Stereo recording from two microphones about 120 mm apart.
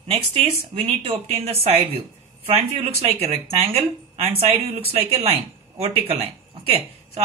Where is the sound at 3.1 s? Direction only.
55° right (ahead or behind).